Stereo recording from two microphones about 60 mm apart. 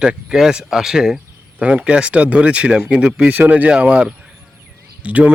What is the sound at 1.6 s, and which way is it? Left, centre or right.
Speech, right.